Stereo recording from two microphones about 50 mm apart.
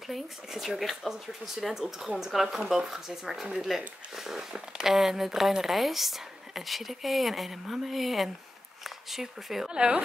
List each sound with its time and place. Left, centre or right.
0.1 s speech: centre
9.7 s speech: right